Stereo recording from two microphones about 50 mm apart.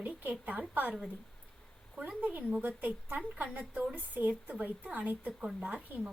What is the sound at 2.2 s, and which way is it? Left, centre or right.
Speech, right.